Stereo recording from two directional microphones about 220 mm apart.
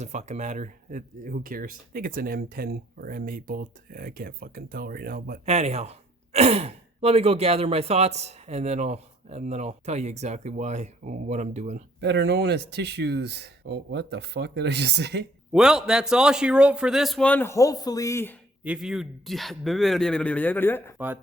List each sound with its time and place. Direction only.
0.0 s speech: 30° right (ahead or behind)
5.5 s speech: 30° right (ahead or behind)
11.9 s speech: 50° right (ahead or behind)
15.5 s a man's voice: 5° right (ahead or behind)
18.6 s a man's voice: 5° right (ahead or behind)